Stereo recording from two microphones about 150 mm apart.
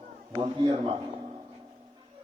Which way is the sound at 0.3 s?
25° right (ahead or behind).